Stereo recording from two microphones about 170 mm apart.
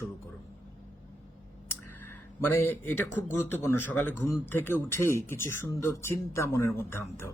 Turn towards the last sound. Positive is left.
turn(degrees=15)  # may be behind; listen again after turning